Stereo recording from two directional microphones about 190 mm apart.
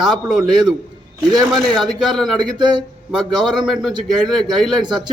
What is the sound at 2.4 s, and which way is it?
Speech, 25° right (ahead or behind).